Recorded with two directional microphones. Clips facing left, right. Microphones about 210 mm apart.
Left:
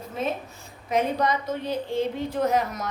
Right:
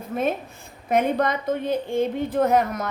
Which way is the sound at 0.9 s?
55° right (ahead or behind).